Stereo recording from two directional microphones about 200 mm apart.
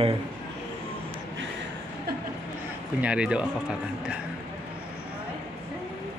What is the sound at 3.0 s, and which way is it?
Speech, 5° right (ahead or behind).